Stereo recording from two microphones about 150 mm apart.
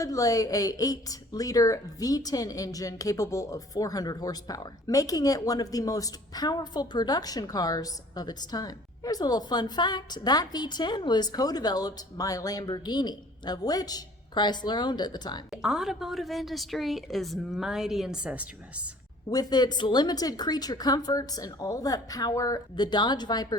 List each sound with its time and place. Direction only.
0.0 s a woman's voice: 25° left (ahead or behind)
15.6 s a woman's voice: 5° right (ahead or behind)
19.3 s a woman's voice: 25° left (ahead or behind)